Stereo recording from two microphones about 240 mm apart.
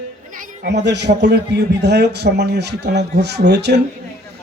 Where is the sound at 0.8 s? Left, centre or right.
Right.